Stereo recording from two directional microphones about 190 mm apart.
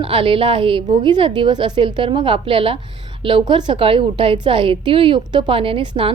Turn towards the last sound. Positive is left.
turn(degrees=-30)  # may be behind; listen again after turning